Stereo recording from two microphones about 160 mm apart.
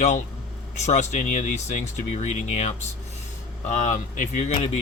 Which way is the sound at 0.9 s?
45° left (ahead or behind).